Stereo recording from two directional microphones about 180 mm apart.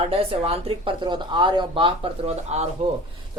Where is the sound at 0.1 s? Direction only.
30° right (ahead or behind).